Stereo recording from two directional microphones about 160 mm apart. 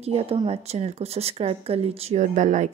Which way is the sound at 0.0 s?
40° right (ahead or behind).